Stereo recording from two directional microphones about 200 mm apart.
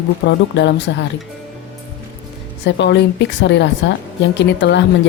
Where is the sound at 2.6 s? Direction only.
60° left (ahead or behind).